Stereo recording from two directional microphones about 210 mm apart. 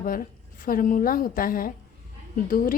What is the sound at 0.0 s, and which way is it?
A woman's voice, 40° left (ahead or behind).